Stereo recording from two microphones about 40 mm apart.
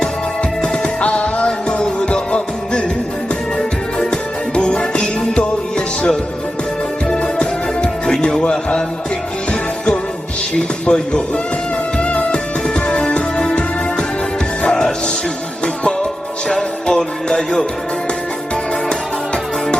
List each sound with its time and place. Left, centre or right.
1.0 s music: left
10.6 s a sound: left
11.9 s music: left
16.5 s music: centre